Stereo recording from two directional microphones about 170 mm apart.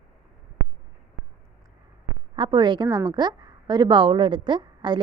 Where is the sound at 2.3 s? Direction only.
30° right (ahead or behind).